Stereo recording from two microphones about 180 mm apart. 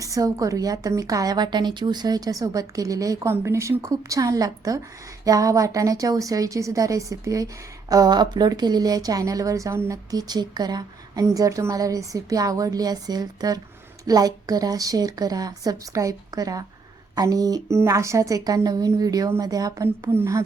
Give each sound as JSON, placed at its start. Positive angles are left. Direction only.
{"t": 0.0, "sound": "a woman's voice", "side_deg": -20}